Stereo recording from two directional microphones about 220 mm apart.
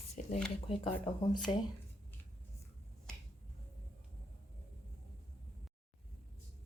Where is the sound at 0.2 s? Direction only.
35° left (ahead or behind).